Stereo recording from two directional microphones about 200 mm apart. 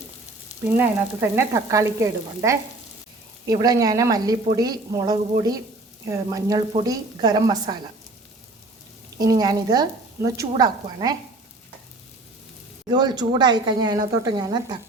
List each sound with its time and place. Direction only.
0.8 s frying: 10° right (ahead or behind)
3.4 s a woman's voice: 20° right (ahead or behind)
6.1 s frying: 15° right (ahead or behind)
6.8 s a woman's voice: 20° right (ahead or behind)
9.1 s a woman's voice: 20° right (ahead or behind)
12.9 s a woman's voice: 20° right (ahead or behind)